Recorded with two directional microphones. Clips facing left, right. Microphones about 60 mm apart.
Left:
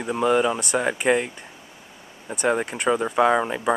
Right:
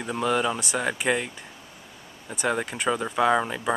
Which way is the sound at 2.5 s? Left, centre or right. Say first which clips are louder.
Left 4 dB; centre.